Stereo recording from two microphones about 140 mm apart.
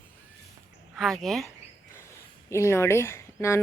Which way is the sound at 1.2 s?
Centre (ahead or behind).